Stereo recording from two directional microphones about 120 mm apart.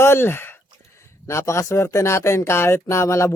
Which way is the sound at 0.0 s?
20° left (ahead or behind).